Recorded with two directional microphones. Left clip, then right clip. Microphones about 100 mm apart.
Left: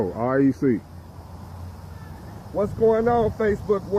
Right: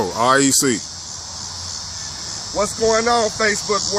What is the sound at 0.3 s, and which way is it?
Speech, 55° right (ahead or behind).